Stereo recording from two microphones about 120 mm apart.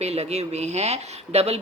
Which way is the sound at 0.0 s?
65° right (ahead or behind).